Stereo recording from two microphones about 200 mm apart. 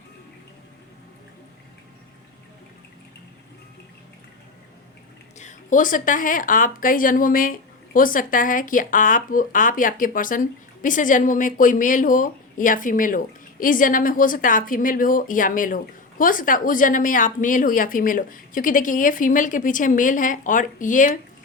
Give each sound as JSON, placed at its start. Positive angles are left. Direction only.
{"t": 5.4, "sound": "a woman's voice", "side_deg": 40}